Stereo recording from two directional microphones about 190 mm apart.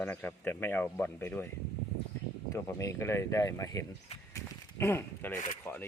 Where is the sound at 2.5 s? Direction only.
15° left (ahead or behind).